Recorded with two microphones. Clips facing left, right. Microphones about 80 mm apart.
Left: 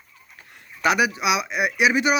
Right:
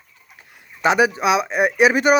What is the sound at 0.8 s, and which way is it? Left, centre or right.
Speech, right.